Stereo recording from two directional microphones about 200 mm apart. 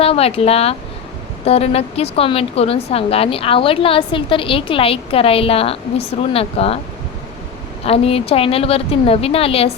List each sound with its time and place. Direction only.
0.0 s speech: 30° left (ahead or behind)
7.9 s speech: 30° left (ahead or behind)